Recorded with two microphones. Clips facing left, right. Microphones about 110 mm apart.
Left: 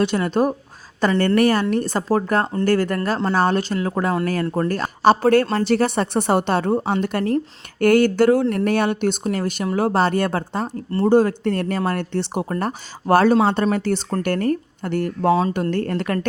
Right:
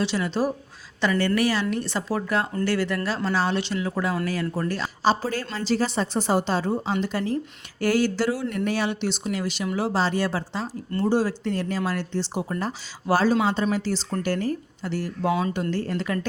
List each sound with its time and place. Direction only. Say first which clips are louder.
0.0 s speech: left 6 dB; 50° left (ahead or behind)
15.3 s speech: left 7 dB; 35° left (ahead or behind)
15.7 s speech: left 4 dB; 55° left (ahead or behind)